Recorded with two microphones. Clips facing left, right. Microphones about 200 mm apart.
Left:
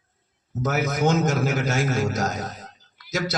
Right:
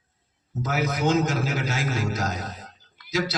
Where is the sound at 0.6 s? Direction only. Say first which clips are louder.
Left 2 dB; 45° left (ahead or behind).